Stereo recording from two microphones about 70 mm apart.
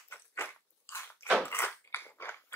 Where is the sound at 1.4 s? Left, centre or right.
Left.